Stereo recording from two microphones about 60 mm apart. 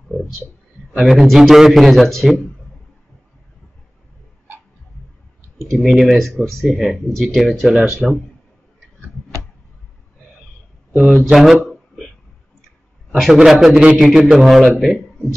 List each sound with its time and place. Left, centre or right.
0.1 s a sound: centre
0.9 s a man's voice: centre
5.7 s a man's voice: centre
10.9 s speech: centre
11.3 s a man's voice: centre
13.1 s a man's voice: centre